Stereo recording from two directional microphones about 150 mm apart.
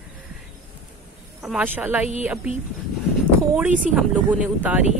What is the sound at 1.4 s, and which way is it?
Speech, centre (ahead or behind).